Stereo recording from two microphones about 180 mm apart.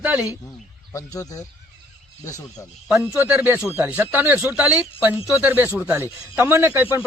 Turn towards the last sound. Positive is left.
turn(degrees=-10)  # may be behind; listen again after turning